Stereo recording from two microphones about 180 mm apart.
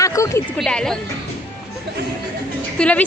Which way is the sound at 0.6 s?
5° left (ahead or behind).